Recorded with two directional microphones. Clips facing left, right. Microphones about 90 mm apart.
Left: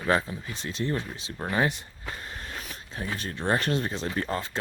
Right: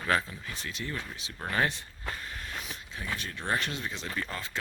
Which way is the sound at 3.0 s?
35° left (ahead or behind).